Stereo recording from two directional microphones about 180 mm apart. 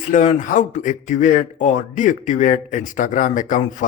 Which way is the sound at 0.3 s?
45° left (ahead or behind).